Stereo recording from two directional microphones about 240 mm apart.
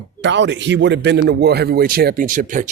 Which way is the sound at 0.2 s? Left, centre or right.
Right.